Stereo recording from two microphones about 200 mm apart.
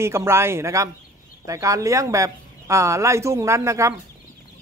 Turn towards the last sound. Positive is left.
turn(degrees=-15)  # may be behind; listen again after turning